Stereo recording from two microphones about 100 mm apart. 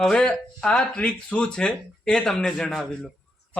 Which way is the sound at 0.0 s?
10° left (ahead or behind).